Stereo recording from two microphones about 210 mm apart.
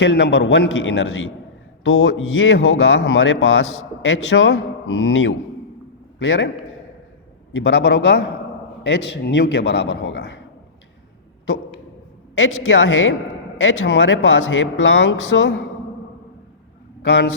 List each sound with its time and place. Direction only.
0.0 s speech: 55° left (ahead or behind)
4.0 s a man's voice: 60° left (ahead or behind)
12.6 s speech: 60° left (ahead or behind)
17.0 s a man's voice: 55° left (ahead or behind)